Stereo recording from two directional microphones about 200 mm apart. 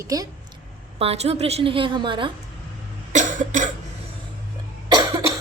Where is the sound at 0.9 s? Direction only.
30° right (ahead or behind).